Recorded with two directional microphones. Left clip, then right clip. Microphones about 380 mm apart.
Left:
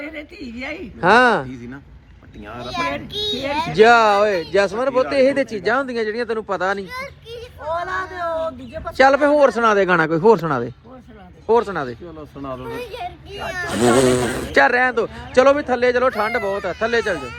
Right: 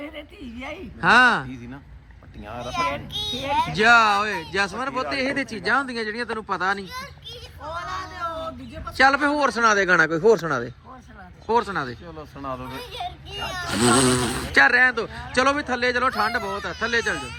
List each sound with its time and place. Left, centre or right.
1.0 s speech: centre
2.5 s a child's voice: centre
3.8 s speech: centre
8.3 s a sound: left
9.0 s speech: centre
11.4 s speech: centre
12.4 s speech: right
13.7 s speech: centre